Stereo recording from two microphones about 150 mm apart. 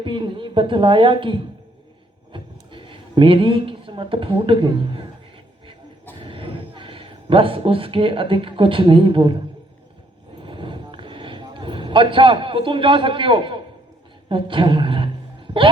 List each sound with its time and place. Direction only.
0.0 s a woman's voice: 35° right (ahead or behind)
6.1 s a man's voice: 35° right (ahead or behind)
10.4 s a sound: 35° right (ahead or behind)